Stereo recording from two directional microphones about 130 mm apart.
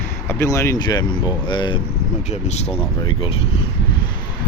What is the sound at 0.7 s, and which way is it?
Speech, 35° left (ahead or behind).